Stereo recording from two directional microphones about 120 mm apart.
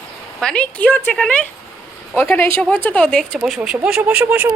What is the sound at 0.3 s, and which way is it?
Speech, 10° left (ahead or behind).